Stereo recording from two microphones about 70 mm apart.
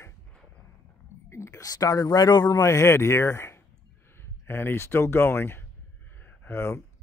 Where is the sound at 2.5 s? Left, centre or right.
Left.